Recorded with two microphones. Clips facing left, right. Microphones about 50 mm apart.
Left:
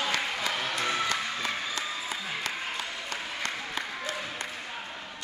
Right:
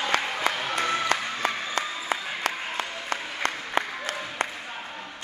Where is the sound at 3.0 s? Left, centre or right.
Right.